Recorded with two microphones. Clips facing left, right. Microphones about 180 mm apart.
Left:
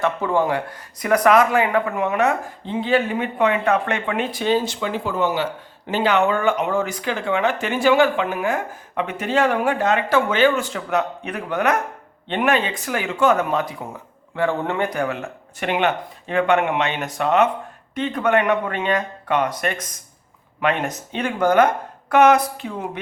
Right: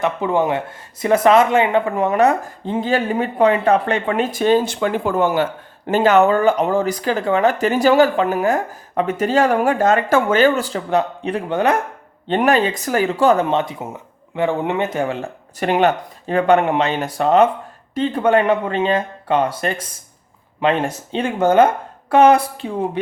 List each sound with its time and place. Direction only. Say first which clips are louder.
0.0 s speech: right 2 dB; 20° right (ahead or behind)
12.3 s speech: right 4 dB; 40° right (ahead or behind)